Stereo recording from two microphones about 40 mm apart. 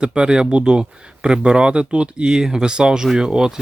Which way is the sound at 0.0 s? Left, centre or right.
Right.